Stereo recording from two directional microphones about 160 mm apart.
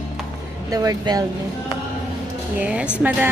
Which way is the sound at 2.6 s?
10° right (ahead or behind).